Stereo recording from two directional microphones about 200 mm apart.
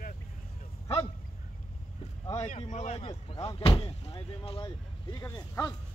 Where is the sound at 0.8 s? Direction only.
30° left (ahead or behind).